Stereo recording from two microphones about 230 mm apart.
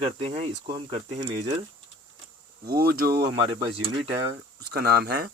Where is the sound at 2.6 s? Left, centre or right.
Right.